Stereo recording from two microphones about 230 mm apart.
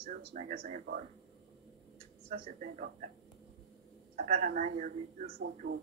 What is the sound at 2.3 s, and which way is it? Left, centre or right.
Speech, right.